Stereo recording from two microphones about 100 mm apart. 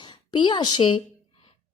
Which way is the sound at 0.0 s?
50° left (ahead or behind).